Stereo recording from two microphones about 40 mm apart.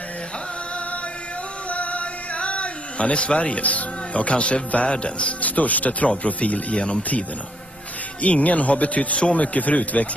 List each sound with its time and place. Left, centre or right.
1.7 s music: left
4.9 s a man's voice: left
5.4 s a man's voice: left